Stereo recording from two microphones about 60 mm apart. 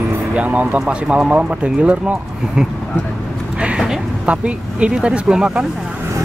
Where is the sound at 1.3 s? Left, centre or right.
Right.